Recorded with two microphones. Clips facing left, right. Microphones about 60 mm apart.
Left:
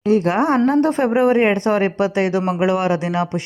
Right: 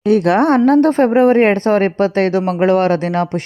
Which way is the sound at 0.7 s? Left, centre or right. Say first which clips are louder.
Right 5 dB; right.